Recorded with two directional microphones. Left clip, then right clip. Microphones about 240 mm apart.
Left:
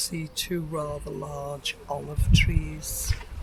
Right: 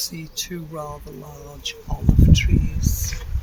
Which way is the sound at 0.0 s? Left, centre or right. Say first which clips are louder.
Right 2 dB; left.